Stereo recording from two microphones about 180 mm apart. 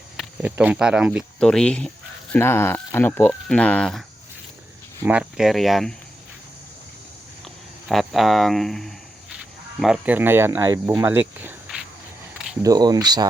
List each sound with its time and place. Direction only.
0.2 s speech: 10° right (ahead or behind)
5.0 s speech: 5° right (ahead or behind)
7.9 s speech: centre (ahead or behind)
12.6 s speech: 20° right (ahead or behind)